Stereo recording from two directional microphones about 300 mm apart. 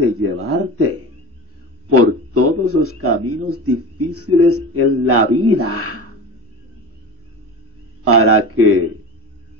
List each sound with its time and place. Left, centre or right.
0.0 s a sound: right
1.9 s speech: right
8.0 s speech: right